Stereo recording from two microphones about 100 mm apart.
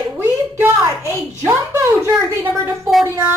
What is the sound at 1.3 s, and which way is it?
A woman's voice, 25° right (ahead or behind).